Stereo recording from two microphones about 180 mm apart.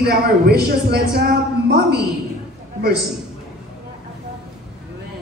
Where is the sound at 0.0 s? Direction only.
60° right (ahead or behind).